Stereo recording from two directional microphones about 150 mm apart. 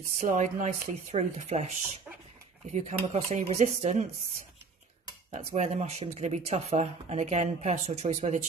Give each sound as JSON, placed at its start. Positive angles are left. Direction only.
{"t": 0.2, "sound": "speech", "side_deg": -55}
{"t": 2.7, "sound": "speech", "side_deg": -50}
{"t": 5.3, "sound": "speech", "side_deg": -50}